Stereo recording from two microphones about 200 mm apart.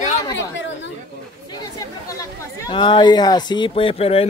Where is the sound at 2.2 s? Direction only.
20° left (ahead or behind).